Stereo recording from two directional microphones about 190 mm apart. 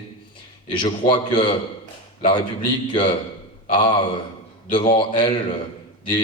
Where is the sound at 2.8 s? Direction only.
25° left (ahead or behind).